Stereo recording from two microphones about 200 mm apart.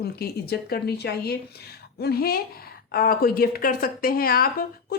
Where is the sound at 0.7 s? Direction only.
55° left (ahead or behind).